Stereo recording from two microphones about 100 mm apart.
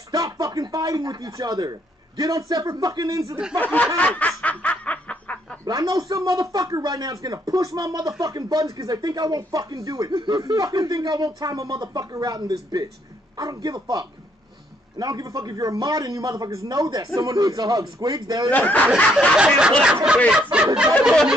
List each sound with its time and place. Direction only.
0.1 s a man's voice: 40° right (ahead or behind)
3.5 s a sound: 15° left (ahead or behind)
4.4 s snicker: 15° left (ahead or behind)
5.7 s a man's voice: 40° right (ahead or behind)
10.1 s a man's voice: 50° right (ahead or behind)
18.5 s a sound: 15° left (ahead or behind)
19.3 s snicker: 10° right (ahead or behind)
20.7 s snicker: 10° right (ahead or behind)